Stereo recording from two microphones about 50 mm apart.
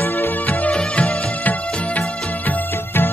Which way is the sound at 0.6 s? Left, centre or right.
Left.